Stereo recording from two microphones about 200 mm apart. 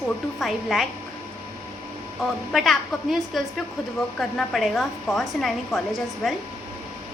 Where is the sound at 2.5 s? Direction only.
Centre (ahead or behind).